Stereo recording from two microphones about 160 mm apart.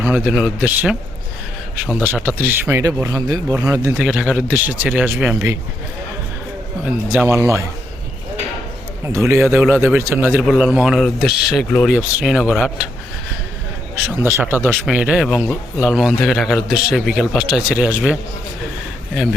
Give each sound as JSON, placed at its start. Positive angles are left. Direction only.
{"t": 0.0, "sound": "a man's voice", "side_deg": -10}
{"t": 4.0, "sound": "speech", "side_deg": -5}
{"t": 6.8, "sound": "speech", "side_deg": -10}
{"t": 9.0, "sound": "speech", "side_deg": -15}
{"t": 10.4, "sound": "a man's voice", "side_deg": 0}
{"t": 14.2, "sound": "a man's voice", "side_deg": -15}